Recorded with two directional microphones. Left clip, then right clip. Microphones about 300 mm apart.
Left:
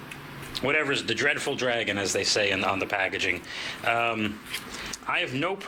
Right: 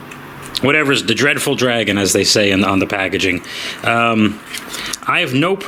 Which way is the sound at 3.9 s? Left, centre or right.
Centre.